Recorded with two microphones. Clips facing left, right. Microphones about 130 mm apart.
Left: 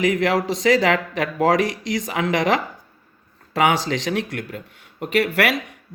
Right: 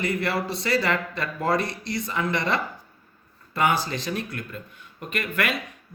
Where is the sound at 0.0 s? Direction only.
90° left.